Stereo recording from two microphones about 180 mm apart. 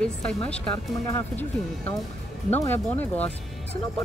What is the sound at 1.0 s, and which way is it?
Speech, 15° left (ahead or behind).